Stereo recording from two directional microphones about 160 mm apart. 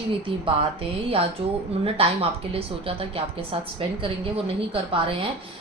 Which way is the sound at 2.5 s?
35° right (ahead or behind).